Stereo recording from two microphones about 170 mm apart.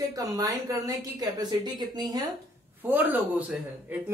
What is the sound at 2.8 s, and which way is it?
A man's voice, 10° right (ahead or behind).